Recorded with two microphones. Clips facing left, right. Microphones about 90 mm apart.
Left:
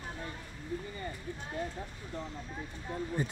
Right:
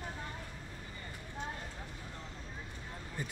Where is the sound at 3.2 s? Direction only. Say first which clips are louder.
Left 5 dB; 30° left (ahead or behind).